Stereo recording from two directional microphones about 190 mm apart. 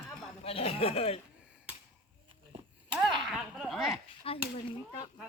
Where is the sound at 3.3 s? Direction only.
Centre (ahead or behind).